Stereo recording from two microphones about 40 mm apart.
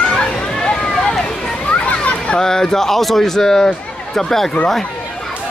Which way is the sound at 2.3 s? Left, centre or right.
Centre.